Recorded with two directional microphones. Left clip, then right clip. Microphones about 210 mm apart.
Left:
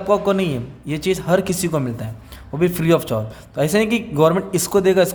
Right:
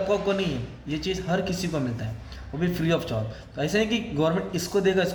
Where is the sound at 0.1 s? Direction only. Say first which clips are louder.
Left 7 dB; 40° left (ahead or behind).